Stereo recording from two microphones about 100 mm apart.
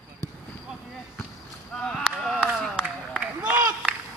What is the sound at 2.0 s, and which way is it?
Speech, 5° right (ahead or behind).